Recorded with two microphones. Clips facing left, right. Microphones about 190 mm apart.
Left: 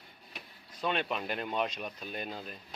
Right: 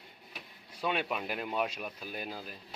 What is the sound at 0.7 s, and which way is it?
A man's voice, 10° right (ahead or behind).